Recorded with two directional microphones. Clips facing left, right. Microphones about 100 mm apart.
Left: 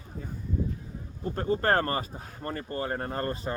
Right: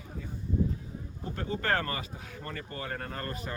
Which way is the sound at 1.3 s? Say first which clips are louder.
Left 5 dB; 40° left (ahead or behind).